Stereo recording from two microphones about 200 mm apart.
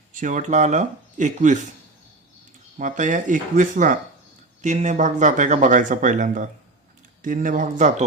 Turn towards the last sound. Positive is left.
turn(degrees=-35)  # may be behind; listen again after turning